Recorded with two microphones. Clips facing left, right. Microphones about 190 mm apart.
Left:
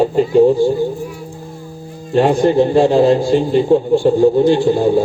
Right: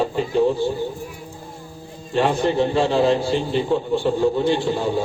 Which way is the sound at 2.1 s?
40° left (ahead or behind).